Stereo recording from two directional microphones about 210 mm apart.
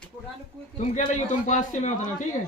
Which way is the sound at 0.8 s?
35° left (ahead or behind).